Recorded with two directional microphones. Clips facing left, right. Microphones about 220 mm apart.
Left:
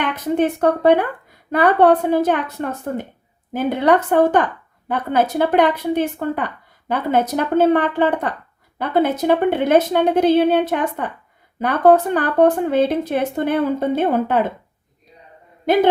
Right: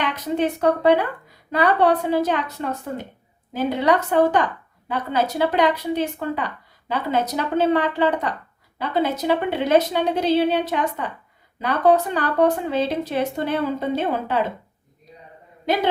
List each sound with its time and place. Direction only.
0.0 s speech: 50° left (ahead or behind)
15.6 s a man's voice: 50° left (ahead or behind)